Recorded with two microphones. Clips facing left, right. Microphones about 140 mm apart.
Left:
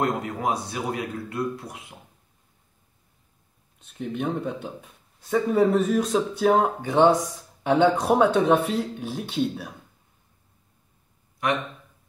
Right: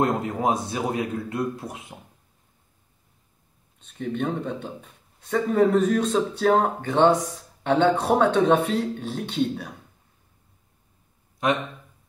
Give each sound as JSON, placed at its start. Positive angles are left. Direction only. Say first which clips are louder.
{"t": 0.0, "sound": "speech", "louder": "right 3 dB", "side_deg": -25}
{"t": 3.8, "sound": "speech", "louder": "right 1 dB", "side_deg": 5}